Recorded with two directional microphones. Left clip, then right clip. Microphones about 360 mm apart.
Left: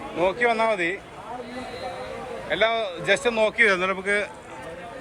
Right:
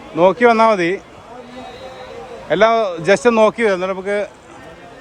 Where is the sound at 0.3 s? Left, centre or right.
Right.